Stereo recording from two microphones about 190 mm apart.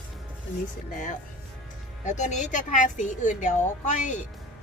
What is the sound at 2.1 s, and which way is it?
A woman's voice, 40° left (ahead or behind).